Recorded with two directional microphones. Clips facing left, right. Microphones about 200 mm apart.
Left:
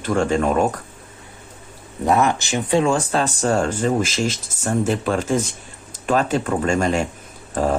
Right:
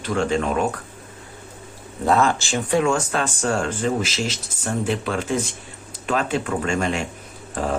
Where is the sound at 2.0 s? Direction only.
20° left (ahead or behind); by 7.0 s 40° left (ahead or behind).